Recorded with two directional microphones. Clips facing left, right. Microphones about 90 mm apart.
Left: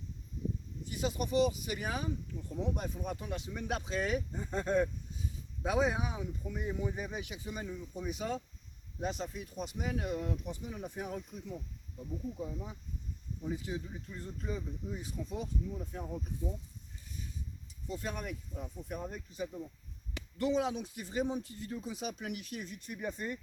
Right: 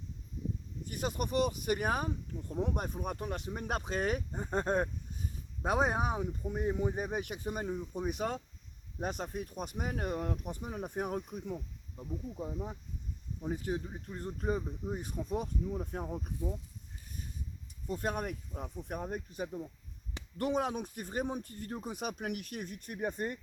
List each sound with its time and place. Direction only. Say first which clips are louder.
0.9 s speech: even; 50° right (ahead or behind)
13.4 s speech: right 3 dB; 50° right (ahead or behind)
17.8 s speech: right 4 dB; 50° right (ahead or behind)